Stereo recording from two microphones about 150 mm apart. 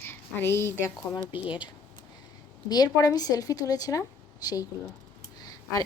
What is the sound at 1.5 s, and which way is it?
A woman's voice, 30° left (ahead or behind).